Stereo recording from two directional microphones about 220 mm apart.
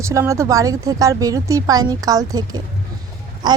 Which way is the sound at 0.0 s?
15° right (ahead or behind).